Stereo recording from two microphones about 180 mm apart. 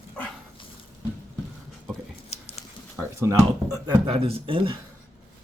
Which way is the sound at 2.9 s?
15° right (ahead or behind).